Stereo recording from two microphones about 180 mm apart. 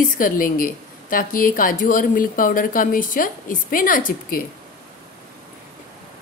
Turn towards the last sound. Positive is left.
turn(degrees=50)  # may be behind; listen again after turning